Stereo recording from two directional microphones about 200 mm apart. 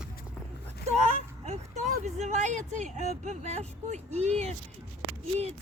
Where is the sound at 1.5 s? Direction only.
35° right (ahead or behind).